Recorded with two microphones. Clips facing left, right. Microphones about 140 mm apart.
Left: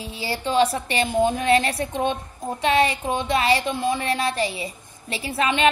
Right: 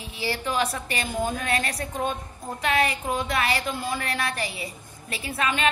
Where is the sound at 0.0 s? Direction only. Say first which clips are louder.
Left 2 dB; 30° left (ahead or behind).